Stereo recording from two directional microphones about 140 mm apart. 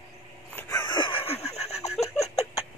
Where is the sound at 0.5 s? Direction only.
20° left (ahead or behind).